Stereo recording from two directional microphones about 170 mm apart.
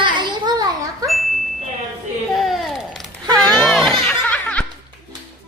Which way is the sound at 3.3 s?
5° left (ahead or behind).